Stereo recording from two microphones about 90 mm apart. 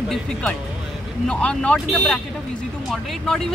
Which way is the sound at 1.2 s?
10° left (ahead or behind).